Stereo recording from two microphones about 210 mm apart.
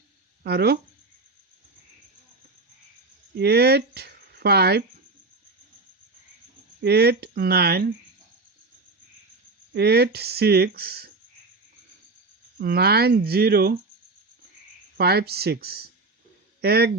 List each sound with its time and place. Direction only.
0.4 s speech: 50° right (ahead or behind)
3.3 s speech: 50° right (ahead or behind)
6.8 s speech: 50° right (ahead or behind)
9.7 s speech: 50° right (ahead or behind)
12.5 s speech: 50° right (ahead or behind)
14.9 s speech: 50° right (ahead or behind)